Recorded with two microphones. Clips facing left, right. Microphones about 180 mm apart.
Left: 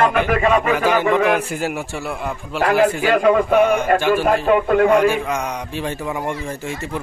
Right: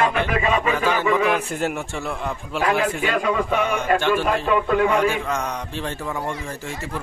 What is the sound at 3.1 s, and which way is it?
Speech, 55° left (ahead or behind).